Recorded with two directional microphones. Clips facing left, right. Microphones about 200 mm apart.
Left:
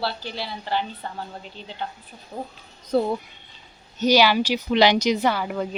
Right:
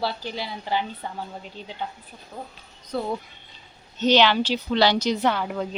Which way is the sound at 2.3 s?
30° left (ahead or behind).